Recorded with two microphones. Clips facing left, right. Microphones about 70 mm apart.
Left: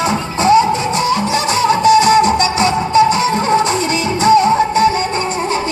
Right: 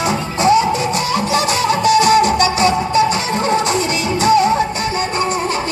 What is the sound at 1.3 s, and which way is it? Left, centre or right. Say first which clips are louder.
Music: left 2 dB; left.